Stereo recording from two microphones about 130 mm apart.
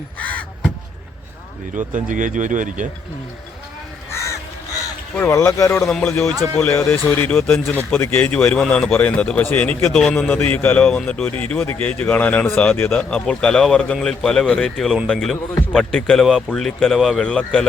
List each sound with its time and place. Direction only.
0.2 s crow: 10° left (ahead or behind)
1.7 s speech: 85° right
5.3 s speech: 25° left (ahead or behind)
5.9 s a man's voice: 10° left (ahead or behind)